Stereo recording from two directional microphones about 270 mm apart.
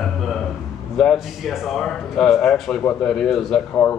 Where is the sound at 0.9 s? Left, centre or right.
Centre.